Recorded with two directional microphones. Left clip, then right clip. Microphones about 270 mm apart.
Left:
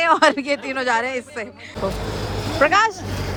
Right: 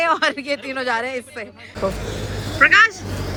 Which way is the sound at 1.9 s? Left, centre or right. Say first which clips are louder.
Even; left.